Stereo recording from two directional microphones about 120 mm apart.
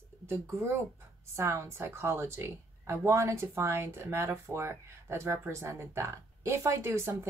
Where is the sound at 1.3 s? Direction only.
20° right (ahead or behind).